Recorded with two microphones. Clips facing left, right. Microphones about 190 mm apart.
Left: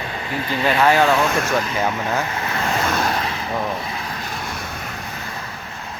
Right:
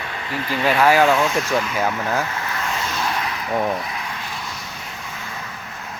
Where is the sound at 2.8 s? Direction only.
55° left (ahead or behind).